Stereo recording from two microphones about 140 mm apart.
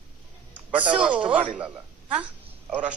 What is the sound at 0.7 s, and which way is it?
Speech, 10° right (ahead or behind).